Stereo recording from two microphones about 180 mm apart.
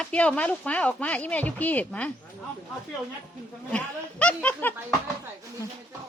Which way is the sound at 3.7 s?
5° left (ahead or behind).